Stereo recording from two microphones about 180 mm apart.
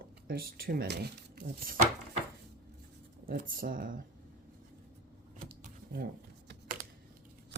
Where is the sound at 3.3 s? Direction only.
55° right (ahead or behind).